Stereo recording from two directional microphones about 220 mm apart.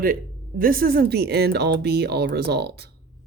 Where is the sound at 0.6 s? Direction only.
40° right (ahead or behind).